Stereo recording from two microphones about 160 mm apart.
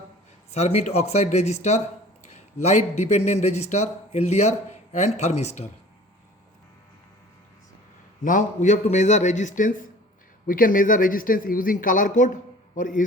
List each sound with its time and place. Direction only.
0.5 s a man's voice: 40° left (ahead or behind)
8.2 s a man's voice: 55° left (ahead or behind)